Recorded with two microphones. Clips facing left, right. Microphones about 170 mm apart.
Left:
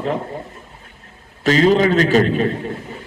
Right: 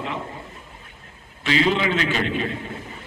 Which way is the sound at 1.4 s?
40° left (ahead or behind).